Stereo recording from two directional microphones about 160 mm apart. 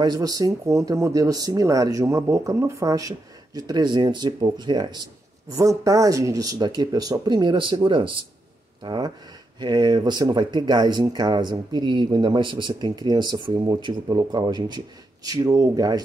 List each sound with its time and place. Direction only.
0.0 s speech: 25° right (ahead or behind)